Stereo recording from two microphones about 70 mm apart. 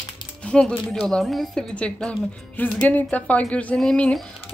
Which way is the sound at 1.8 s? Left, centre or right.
Centre.